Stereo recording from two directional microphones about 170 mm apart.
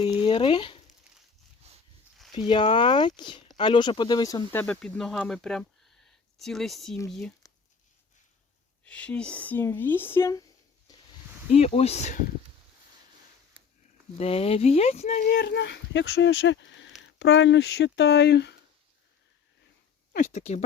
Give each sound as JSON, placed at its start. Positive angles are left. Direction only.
{"t": 0.0, "sound": "speech", "side_deg": 30}
{"t": 2.3, "sound": "speech", "side_deg": 25}
{"t": 4.6, "sound": "speech", "side_deg": 5}
{"t": 8.8, "sound": "speech", "side_deg": 5}
{"t": 11.5, "sound": "speech", "side_deg": 40}
{"t": 14.2, "sound": "speech", "side_deg": 35}
{"t": 15.3, "sound": "speech", "side_deg": 85}
{"t": 20.1, "sound": "speech", "side_deg": 45}